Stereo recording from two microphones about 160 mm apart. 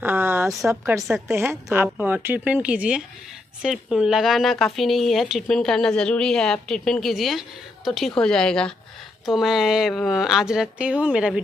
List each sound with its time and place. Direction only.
0.0 s a sound: 15° right (ahead or behind)
0.7 s speech: 15° right (ahead or behind)
1.0 s a woman's voice: centre (ahead or behind)
1.3 s a woman's voice: 15° right (ahead or behind)